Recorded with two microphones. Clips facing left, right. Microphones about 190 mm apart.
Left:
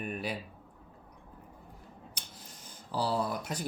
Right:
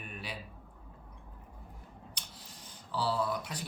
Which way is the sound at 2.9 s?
45° left (ahead or behind).